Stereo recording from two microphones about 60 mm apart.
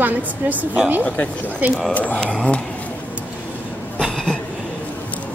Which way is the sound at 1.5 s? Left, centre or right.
Right.